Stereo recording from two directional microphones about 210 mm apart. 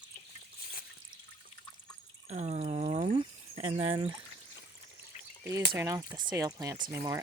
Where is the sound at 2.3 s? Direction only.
30° right (ahead or behind).